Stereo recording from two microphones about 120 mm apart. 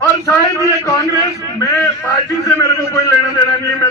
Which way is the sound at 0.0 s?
25° left (ahead or behind).